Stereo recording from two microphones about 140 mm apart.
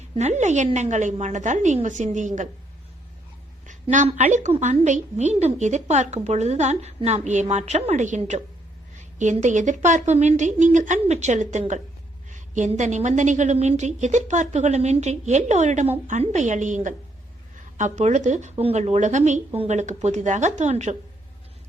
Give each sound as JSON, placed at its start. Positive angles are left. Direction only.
{"t": 0.2, "sound": "a woman's voice", "side_deg": -55}
{"t": 3.7, "sound": "a woman's voice", "side_deg": -60}